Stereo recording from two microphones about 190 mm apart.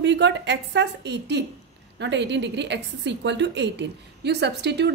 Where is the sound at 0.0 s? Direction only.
65° right (ahead or behind).